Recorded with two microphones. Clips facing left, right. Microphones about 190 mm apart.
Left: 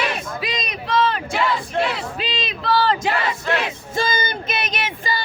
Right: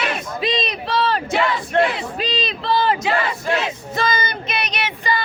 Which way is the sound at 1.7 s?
65° right (ahead or behind).